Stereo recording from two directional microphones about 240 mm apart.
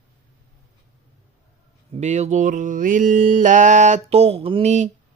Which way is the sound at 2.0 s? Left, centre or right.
Right.